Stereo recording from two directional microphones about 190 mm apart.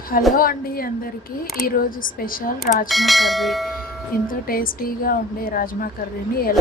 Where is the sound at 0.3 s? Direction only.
50° left (ahead or behind).